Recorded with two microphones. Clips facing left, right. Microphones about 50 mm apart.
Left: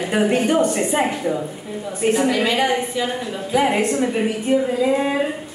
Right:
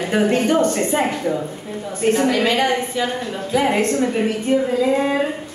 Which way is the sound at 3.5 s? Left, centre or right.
Left.